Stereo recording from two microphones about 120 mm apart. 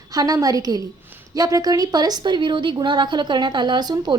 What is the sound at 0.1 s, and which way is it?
A woman's voice, 30° right (ahead or behind).